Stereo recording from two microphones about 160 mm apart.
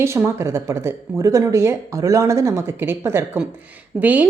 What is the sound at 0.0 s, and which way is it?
A woman's voice, 15° right (ahead or behind).